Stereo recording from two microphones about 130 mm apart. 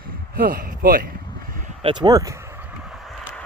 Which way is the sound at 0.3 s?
90° right.